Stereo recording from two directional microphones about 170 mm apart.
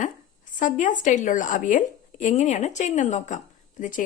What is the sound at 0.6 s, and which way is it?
Speech, 50° left (ahead or behind).